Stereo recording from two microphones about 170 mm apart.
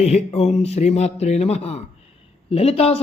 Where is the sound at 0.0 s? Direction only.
40° left (ahead or behind).